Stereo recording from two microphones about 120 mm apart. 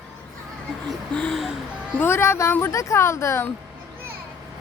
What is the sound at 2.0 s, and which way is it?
Speech, 20° left (ahead or behind).